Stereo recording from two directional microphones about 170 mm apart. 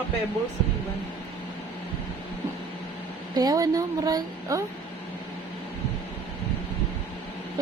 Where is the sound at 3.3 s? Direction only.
25° right (ahead or behind).